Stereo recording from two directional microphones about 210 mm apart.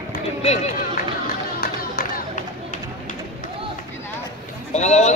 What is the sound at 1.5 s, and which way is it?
Music, 45° left (ahead or behind).